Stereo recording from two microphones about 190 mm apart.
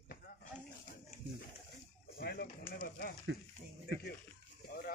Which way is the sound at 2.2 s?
50° left (ahead or behind).